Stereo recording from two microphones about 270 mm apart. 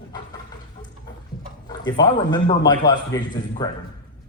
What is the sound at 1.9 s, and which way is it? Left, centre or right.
Speech, centre.